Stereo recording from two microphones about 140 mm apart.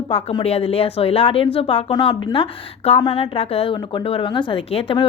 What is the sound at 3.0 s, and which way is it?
A woman's voice, 35° left (ahead or behind).